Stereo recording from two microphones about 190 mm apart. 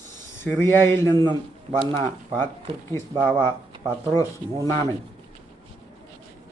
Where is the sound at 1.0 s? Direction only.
20° right (ahead or behind).